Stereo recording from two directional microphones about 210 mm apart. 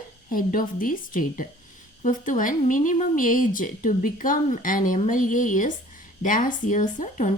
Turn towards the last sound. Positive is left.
turn(degrees=35)  # may be behind; listen again after turning